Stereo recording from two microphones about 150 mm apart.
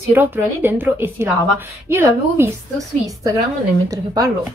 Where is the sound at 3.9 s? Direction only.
25° right (ahead or behind).